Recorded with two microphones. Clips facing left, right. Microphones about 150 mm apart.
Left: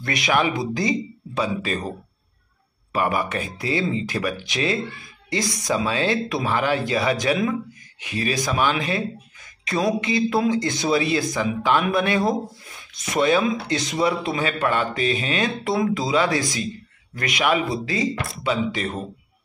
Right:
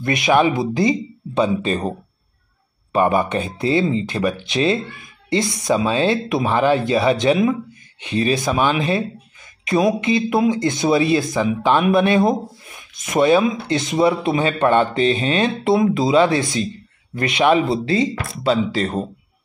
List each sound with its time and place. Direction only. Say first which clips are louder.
0.0 s speech: right 6 dB; 20° right (ahead or behind)